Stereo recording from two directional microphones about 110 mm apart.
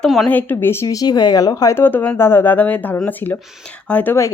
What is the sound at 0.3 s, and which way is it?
Speech, 15° left (ahead or behind).